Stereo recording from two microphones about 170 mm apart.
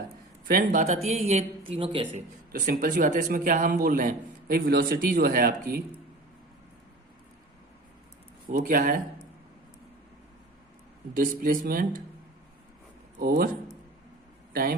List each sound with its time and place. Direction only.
0.4 s speech: 60° right (ahead or behind); by 2.0 s 30° right (ahead or behind)
2.5 s a man's voice: 55° right (ahead or behind)
8.4 s speech: 55° right (ahead or behind)
11.1 s a man's voice: 55° right (ahead or behind)
13.1 s speech: 60° right (ahead or behind)
14.5 s a man's voice: 55° right (ahead or behind)